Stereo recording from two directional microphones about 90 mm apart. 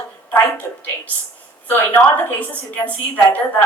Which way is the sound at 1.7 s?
20° left (ahead or behind).